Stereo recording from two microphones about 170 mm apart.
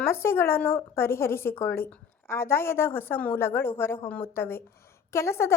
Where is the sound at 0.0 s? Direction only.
15° left (ahead or behind).